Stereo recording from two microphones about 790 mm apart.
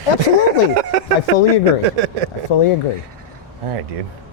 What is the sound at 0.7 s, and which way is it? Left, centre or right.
Speech, right.